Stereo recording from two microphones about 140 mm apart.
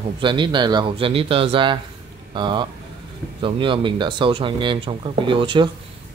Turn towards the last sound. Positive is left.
turn(degrees=-35)  # may be behind; listen again after turning